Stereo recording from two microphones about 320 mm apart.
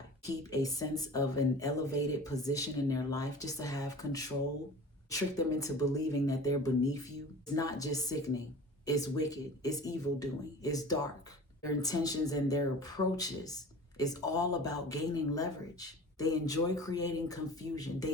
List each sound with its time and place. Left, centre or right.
0.3 s speech: centre